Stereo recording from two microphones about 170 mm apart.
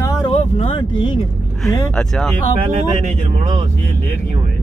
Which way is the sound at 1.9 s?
Centre (ahead or behind).